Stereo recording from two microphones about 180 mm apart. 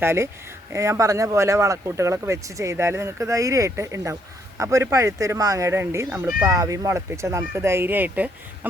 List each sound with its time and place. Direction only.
0.0 s speech: 15° right (ahead or behind)